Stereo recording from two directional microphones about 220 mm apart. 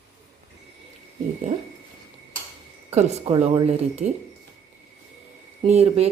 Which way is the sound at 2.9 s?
30° right (ahead or behind).